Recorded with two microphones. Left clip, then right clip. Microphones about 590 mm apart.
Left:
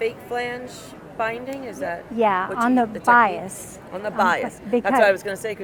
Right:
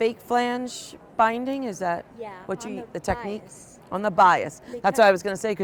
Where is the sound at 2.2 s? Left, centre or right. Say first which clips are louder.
Left 14 dB; left.